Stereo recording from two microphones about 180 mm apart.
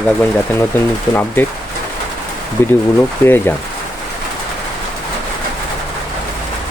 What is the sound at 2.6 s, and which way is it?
Speech, 15° left (ahead or behind).